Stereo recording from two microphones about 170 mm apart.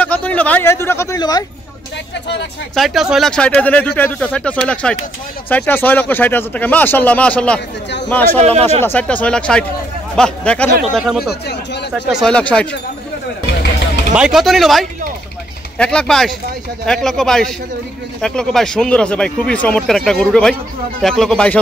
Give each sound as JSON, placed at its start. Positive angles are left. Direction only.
{"t": 0.0, "sound": "speech", "side_deg": 10}
{"t": 2.7, "sound": "speech", "side_deg": 0}
{"t": 8.4, "sound": "speech", "side_deg": -40}
{"t": 8.8, "sound": "speech", "side_deg": 10}
{"t": 14.1, "sound": "speech", "side_deg": -5}